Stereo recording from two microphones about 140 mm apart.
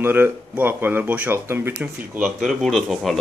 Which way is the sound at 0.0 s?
15° right (ahead or behind).